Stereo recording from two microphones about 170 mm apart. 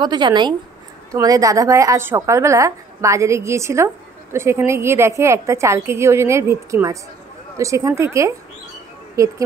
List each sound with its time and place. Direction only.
0.0 s a woman's voice: 25° right (ahead or behind)